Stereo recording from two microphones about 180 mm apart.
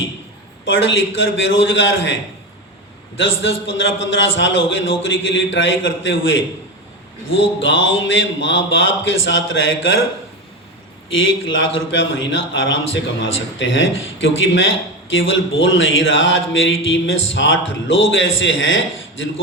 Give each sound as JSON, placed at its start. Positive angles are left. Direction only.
{"t": 0.6, "sound": "speech", "side_deg": 90}
{"t": 3.2, "sound": "speech", "side_deg": 90}
{"t": 11.1, "sound": "speech", "side_deg": 90}